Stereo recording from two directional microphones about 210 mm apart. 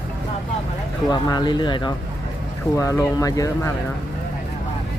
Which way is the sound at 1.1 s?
20° left (ahead or behind).